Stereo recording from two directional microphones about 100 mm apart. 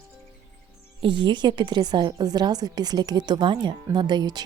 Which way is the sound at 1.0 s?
50° right (ahead or behind).